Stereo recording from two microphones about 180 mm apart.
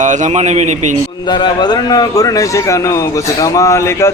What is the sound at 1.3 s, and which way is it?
A man's voice, 25° left (ahead or behind).